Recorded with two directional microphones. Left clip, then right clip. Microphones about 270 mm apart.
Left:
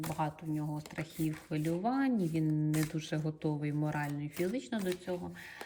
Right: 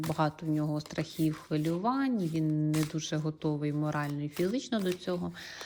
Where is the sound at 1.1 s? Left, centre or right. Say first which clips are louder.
Right 5 dB; centre.